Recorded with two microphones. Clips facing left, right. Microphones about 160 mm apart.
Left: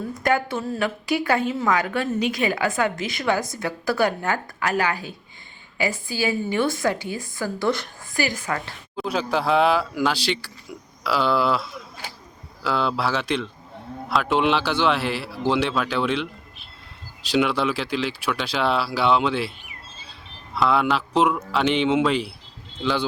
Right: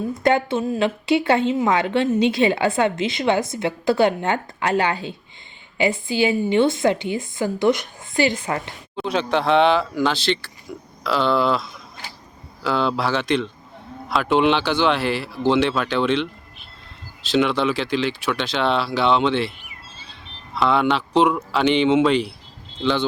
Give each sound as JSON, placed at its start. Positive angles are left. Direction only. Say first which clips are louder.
{"t": 0.0, "sound": "a woman's voice", "louder": "right 4 dB", "side_deg": -25}
{"t": 9.0, "sound": "speech", "louder": "right 3 dB", "side_deg": 5}
{"t": 17.3, "sound": "speech", "louder": "right 2 dB", "side_deg": 5}